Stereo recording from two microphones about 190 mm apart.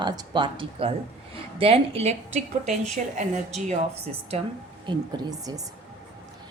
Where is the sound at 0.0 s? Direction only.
25° right (ahead or behind).